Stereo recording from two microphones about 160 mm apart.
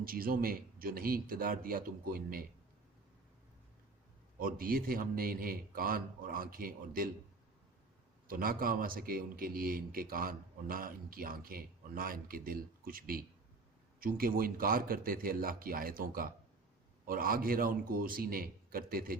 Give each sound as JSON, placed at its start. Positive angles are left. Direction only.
{"t": 0.0, "sound": "a man's voice", "side_deg": -65}
{"t": 4.4, "sound": "a man's voice", "side_deg": -65}
{"t": 8.3, "sound": "a man's voice", "side_deg": -65}